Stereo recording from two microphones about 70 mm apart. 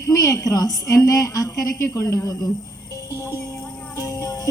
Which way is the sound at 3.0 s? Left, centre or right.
Left.